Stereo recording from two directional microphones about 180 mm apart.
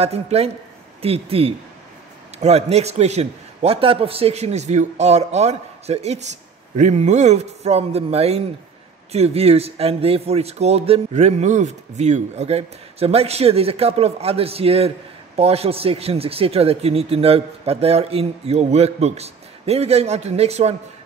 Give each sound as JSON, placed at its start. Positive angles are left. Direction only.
{"t": 0.0, "sound": "a man's voice", "side_deg": -35}